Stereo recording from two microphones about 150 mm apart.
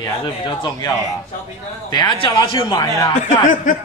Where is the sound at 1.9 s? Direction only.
30° left (ahead or behind).